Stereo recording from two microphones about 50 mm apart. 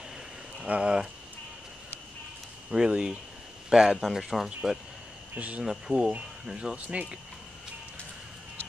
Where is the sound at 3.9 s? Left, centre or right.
Centre.